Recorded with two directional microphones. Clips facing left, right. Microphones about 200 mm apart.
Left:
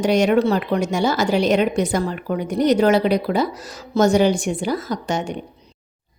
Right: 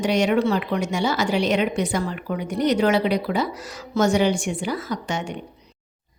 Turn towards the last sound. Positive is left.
turn(degrees=40)  # may be behind; listen again after turning